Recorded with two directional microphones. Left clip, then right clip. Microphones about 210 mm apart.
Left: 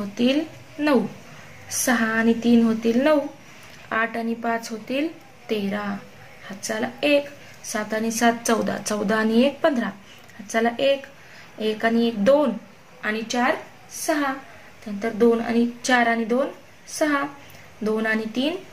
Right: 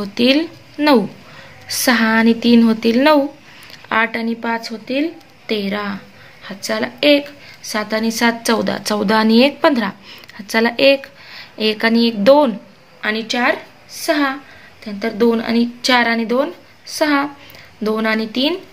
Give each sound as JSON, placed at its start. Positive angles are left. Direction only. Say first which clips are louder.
{"t": 0.1, "sound": "a woman's voice", "louder": "right 8 dB", "side_deg": -35}
{"t": 5.5, "sound": "a woman's voice", "louder": "right 6 dB", "side_deg": -35}